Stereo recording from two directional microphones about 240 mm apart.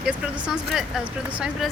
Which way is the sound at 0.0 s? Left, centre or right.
Centre.